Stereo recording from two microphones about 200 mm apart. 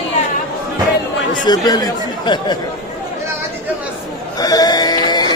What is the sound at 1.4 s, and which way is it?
Speech, 20° left (ahead or behind).